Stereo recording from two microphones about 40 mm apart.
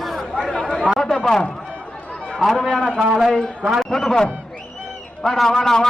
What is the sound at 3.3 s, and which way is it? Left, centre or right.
Speech, centre.